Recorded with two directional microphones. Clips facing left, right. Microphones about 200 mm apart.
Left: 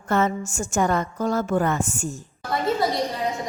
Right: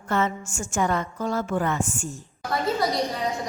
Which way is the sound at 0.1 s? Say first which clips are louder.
Left 3 dB; 40° left (ahead or behind).